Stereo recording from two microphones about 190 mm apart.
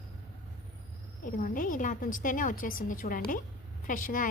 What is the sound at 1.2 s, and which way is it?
A woman's voice, 45° left (ahead or behind).